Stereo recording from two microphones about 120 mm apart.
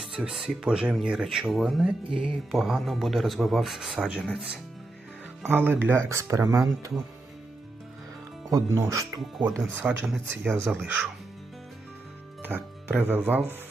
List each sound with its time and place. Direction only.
0.0 s speech: 5° right (ahead or behind)
2.0 s music: 50° right (ahead or behind)
2.5 s speech: centre (ahead or behind)
5.4 s speech: 15° right (ahead or behind)
8.4 s speech: 30° right (ahead or behind)
9.8 s speech: 10° right (ahead or behind)
12.4 s music: 15° right (ahead or behind)
13.0 s speech: 15° right (ahead or behind)